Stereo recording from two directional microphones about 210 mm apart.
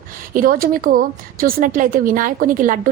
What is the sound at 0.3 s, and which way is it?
A woman's voice, 40° right (ahead or behind).